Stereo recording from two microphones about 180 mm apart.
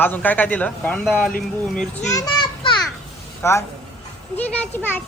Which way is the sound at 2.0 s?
20° left (ahead or behind).